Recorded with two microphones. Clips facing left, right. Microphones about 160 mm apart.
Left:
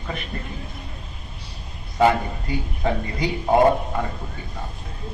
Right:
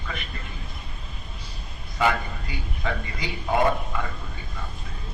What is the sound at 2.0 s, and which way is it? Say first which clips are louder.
A man's voice: left 6 dB; 40° left (ahead or behind).